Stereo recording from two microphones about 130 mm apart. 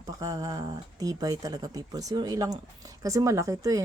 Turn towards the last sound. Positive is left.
turn(degrees=-25)  # may be behind; listen again after turning